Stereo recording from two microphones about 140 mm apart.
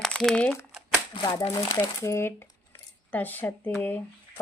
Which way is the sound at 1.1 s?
35° left (ahead or behind).